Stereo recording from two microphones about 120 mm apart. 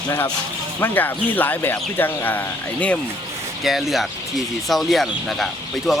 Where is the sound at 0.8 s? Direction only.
15° left (ahead or behind).